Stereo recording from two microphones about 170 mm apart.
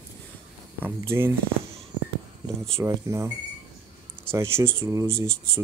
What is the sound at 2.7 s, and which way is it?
Speech, 15° right (ahead or behind).